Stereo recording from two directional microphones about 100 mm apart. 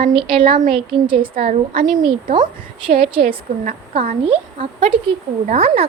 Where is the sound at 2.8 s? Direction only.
65° right (ahead or behind).